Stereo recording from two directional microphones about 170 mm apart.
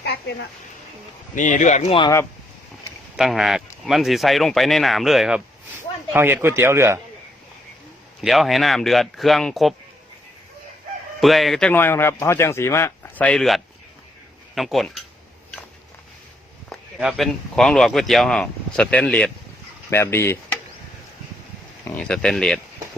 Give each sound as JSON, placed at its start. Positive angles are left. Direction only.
{"t": 0.0, "sound": "a sound", "side_deg": 75}
{"t": 1.4, "sound": "speech", "side_deg": 45}
{"t": 3.2, "sound": "speech", "side_deg": 0}
{"t": 6.1, "sound": "a man's voice", "side_deg": -10}
{"t": 8.2, "sound": "speech", "side_deg": 0}
{"t": 11.2, "sound": "speech", "side_deg": 0}
{"t": 16.6, "sound": "speech", "side_deg": 0}
{"t": 21.9, "sound": "speech", "side_deg": 5}